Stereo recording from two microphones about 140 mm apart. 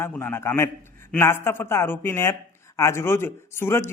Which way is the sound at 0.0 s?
15° left (ahead or behind).